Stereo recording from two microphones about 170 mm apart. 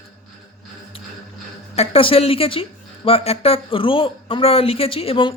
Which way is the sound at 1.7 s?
35° left (ahead or behind).